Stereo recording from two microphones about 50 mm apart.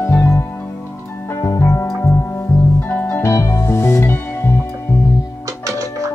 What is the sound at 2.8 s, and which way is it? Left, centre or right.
Music, left.